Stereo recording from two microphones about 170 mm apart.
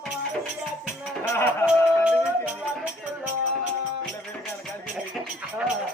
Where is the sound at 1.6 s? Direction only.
15° left (ahead or behind).